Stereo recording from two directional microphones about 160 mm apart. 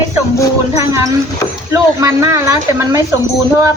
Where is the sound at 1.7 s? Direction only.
20° right (ahead or behind).